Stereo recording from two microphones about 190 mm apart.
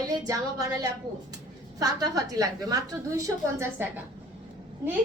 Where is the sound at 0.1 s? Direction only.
20° right (ahead or behind).